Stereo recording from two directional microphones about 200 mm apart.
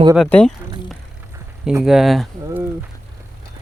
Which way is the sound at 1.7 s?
5° right (ahead or behind).